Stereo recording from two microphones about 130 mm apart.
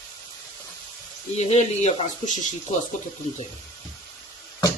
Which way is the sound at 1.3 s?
60° left (ahead or behind).